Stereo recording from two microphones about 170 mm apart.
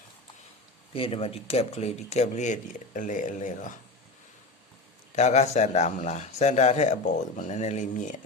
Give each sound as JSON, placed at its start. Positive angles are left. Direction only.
{"t": 0.9, "sound": "speech", "side_deg": 35}
{"t": 5.1, "sound": "speech", "side_deg": 40}